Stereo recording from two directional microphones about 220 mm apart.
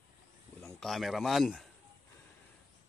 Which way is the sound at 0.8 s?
Centre (ahead or behind).